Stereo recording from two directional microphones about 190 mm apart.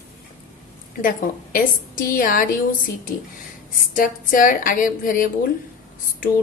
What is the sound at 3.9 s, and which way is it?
A woman's voice, 45° left (ahead or behind).